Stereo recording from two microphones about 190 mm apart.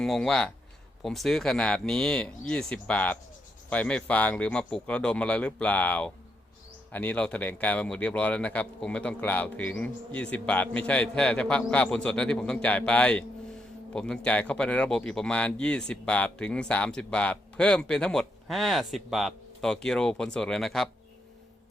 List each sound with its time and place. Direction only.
0.0 s a man's voice: 5° left (ahead or behind)